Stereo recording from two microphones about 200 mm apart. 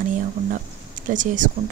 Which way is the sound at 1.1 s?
40° right (ahead or behind).